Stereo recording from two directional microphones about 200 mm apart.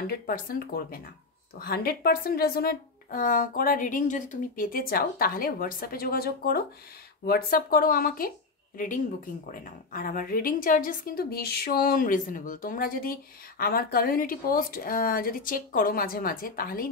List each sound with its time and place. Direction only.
0.0 s speech: 50° left (ahead or behind)